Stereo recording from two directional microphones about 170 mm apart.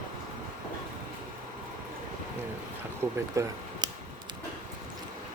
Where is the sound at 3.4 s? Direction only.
20° right (ahead or behind).